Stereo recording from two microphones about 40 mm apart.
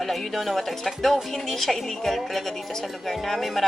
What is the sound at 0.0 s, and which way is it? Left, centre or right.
A woman's voice, centre.